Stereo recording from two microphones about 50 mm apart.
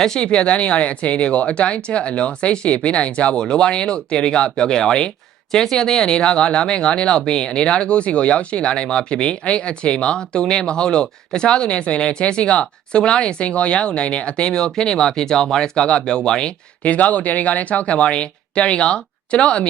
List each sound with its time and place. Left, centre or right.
0.0 s speech: centre